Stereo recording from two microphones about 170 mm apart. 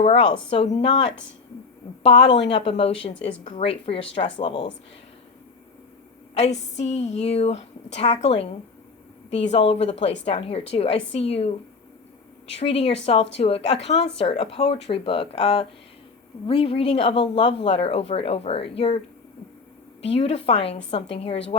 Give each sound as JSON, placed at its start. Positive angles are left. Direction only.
{"t": 0.0, "sound": "speech", "side_deg": 35}
{"t": 6.3, "sound": "a woman's voice", "side_deg": 40}
{"t": 12.5, "sound": "speech", "side_deg": 35}
{"t": 20.0, "sound": "speech", "side_deg": 35}